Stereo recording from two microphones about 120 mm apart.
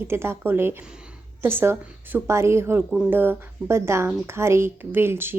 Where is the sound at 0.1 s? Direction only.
20° right (ahead or behind).